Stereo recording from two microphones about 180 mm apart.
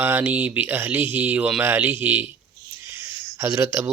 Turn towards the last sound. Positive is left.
turn(degrees=-15)  # may be behind; listen again after turning